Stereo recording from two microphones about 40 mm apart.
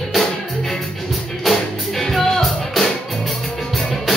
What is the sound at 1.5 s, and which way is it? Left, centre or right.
Music, centre.